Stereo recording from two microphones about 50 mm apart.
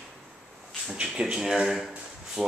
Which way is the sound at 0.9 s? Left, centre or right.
Centre.